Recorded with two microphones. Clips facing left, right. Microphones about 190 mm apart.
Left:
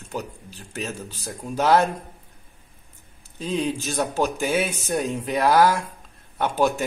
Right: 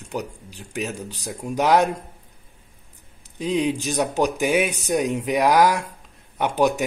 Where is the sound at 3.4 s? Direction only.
15° right (ahead or behind).